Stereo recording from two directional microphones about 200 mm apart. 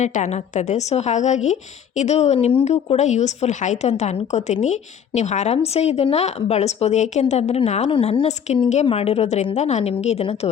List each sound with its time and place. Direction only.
0.0 s a woman's voice: 35° left (ahead or behind)